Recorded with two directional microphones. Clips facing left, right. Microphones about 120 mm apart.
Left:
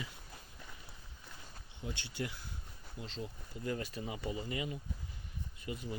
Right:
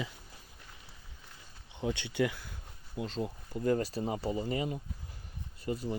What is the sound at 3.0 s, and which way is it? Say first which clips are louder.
Speech: right 6 dB; 50° right (ahead or behind).